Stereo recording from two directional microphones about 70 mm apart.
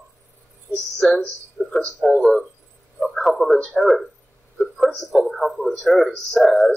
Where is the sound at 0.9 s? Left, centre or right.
Centre.